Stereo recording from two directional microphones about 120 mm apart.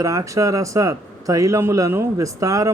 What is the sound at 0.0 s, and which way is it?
Speech, 25° right (ahead or behind).